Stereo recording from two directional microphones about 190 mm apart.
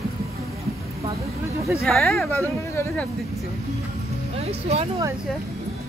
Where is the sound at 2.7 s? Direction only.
10° left (ahead or behind).